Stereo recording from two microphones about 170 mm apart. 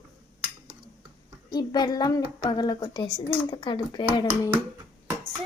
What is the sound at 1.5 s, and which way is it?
Child singing, 25° left (ahead or behind).